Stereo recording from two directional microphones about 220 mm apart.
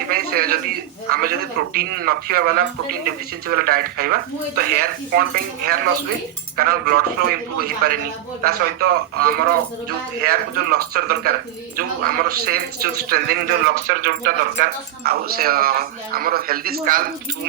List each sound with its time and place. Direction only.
0.1 s speech: 45° right (ahead or behind)